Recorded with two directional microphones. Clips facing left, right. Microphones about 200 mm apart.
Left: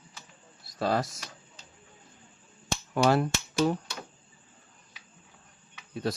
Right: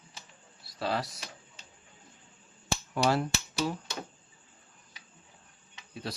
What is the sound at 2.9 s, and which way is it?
Speech, 50° left (ahead or behind).